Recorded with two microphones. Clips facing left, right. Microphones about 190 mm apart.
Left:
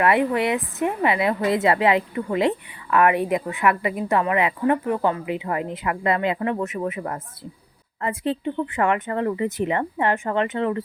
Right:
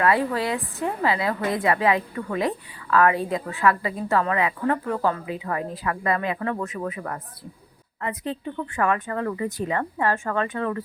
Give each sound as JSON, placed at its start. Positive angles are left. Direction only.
{"t": 0.0, "sound": "a woman's voice", "side_deg": 25}